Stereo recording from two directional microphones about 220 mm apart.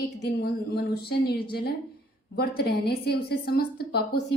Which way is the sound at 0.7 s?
45° left (ahead or behind).